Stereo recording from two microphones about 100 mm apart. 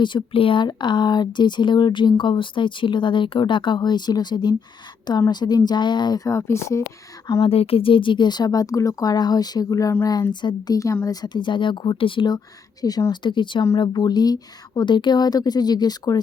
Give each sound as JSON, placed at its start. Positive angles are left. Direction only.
{"t": 0.0, "sound": "speech", "side_deg": 55}
{"t": 7.4, "sound": "a woman's voice", "side_deg": 75}
{"t": 12.8, "sound": "speech", "side_deg": 40}